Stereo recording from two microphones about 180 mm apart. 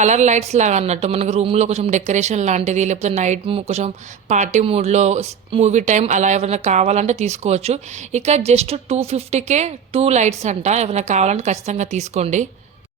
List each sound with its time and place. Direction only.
0.0 s a woman's voice: 40° right (ahead or behind)